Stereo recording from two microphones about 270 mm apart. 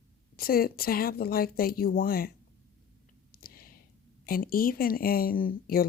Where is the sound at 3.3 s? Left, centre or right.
Left.